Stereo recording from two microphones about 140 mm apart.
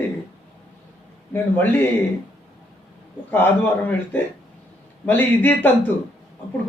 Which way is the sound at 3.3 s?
15° left (ahead or behind).